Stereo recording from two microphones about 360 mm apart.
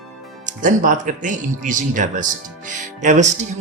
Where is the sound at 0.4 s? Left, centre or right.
Right.